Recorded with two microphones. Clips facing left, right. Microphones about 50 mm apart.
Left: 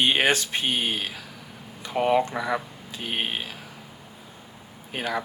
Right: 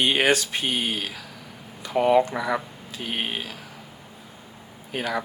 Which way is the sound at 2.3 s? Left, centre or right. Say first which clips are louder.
Right 1 dB; centre.